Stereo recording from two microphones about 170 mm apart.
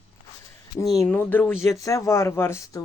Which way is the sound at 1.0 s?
10° left (ahead or behind).